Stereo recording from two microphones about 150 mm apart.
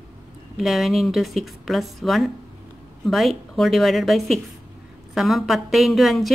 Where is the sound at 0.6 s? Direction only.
Centre (ahead or behind).